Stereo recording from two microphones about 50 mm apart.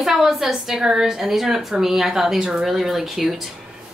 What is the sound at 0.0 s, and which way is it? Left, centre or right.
A woman's voice, centre.